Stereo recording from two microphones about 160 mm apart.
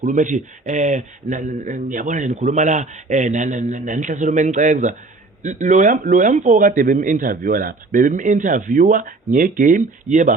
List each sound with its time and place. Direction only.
0.0 s a man's voice: 50° right (ahead or behind)